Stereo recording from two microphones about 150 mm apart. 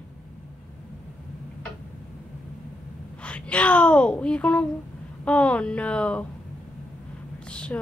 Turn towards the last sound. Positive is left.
turn(degrees=5)  # may be behind; listen again after turning